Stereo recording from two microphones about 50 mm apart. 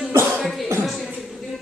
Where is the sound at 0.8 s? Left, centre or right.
Centre.